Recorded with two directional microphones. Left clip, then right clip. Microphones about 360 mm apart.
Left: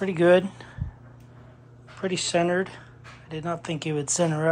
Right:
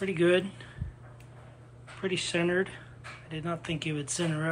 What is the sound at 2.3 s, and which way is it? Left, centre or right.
Speech, centre.